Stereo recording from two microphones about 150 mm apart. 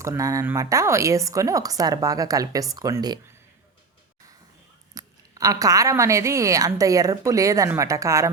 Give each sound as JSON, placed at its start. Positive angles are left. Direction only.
{"t": 0.0, "sound": "a woman's voice", "side_deg": -20}
{"t": 4.9, "sound": "a woman's voice", "side_deg": -20}